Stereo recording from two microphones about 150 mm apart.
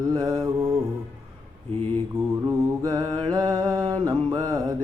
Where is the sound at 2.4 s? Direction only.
25° right (ahead or behind).